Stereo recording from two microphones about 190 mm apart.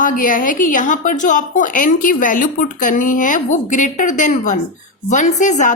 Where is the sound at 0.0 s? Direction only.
45° left (ahead or behind).